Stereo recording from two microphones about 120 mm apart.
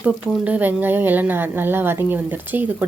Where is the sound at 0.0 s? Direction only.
15° right (ahead or behind).